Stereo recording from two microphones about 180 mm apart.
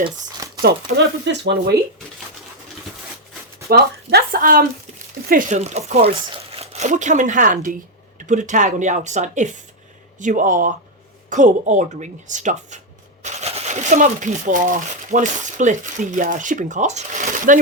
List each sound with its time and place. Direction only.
0.0 s crumpling: 20° right (ahead or behind)
0.6 s speech: 75° right (ahead or behind)
3.7 s speech: 55° right (ahead or behind)